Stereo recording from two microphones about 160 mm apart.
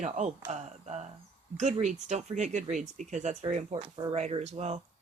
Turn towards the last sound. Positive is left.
turn(degrees=-45)  # may be behind; listen again after turning